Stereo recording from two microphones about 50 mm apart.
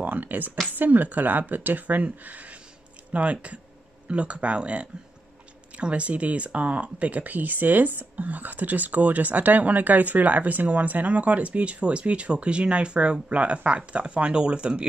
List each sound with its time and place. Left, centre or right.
0.0 s speech: right